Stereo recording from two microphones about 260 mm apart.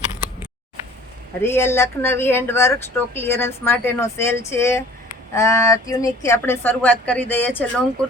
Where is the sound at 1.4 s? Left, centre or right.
Centre.